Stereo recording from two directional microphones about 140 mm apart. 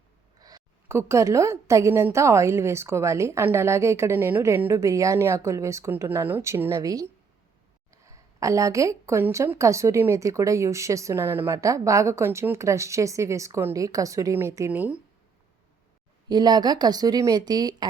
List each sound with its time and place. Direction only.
0.3 s a woman's voice: 25° right (ahead or behind)
16.3 s a woman's voice: 30° right (ahead or behind)